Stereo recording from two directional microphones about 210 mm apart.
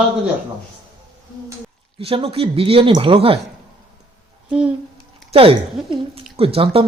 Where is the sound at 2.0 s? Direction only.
25° right (ahead or behind).